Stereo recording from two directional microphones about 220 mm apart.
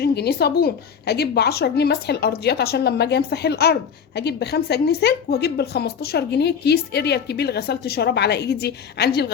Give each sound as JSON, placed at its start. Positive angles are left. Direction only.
{"t": 0.0, "sound": "a woman's voice", "side_deg": 45}